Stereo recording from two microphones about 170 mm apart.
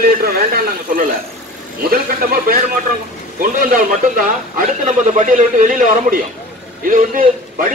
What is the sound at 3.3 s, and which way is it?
A man's voice, 55° right (ahead or behind).